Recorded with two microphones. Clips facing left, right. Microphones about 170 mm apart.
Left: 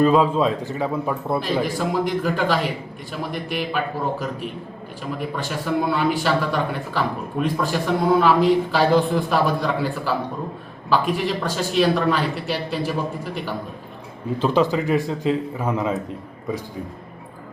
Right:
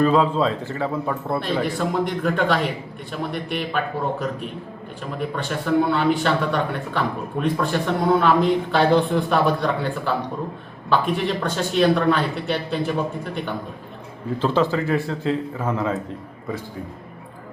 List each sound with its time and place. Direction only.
0.0 s a man's voice: 15° left (ahead or behind)